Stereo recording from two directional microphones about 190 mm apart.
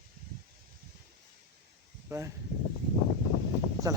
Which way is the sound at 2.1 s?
15° right (ahead or behind).